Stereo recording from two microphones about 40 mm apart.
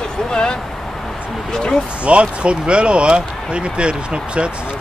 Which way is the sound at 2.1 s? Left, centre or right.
Right.